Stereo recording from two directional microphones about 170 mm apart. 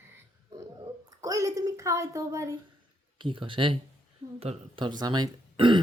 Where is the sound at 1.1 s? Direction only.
20° right (ahead or behind).